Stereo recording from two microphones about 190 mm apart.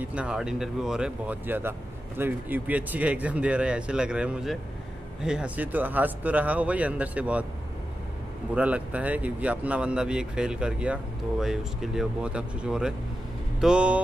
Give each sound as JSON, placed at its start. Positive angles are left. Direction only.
{"t": 0.1, "sound": "speech", "side_deg": -5}
{"t": 8.5, "sound": "speech", "side_deg": -5}